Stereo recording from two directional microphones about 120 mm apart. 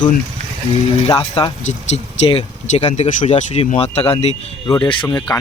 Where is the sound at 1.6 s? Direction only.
65° left (ahead or behind).